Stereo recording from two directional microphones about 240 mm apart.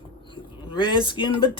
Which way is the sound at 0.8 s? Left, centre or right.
Centre.